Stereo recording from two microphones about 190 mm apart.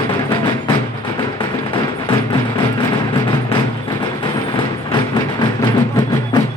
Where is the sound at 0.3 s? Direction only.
25° left (ahead or behind).